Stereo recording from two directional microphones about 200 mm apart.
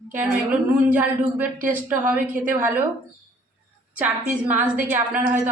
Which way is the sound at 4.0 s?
10° right (ahead or behind).